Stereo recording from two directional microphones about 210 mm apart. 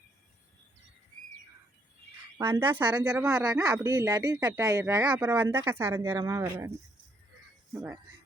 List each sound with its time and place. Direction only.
2.4 s speech: 10° right (ahead or behind)